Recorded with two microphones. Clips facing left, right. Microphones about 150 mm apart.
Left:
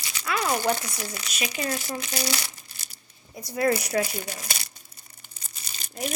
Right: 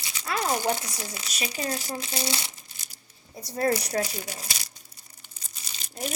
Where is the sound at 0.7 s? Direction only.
25° right (ahead or behind).